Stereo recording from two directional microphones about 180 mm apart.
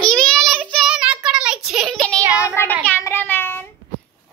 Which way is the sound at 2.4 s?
10° left (ahead or behind).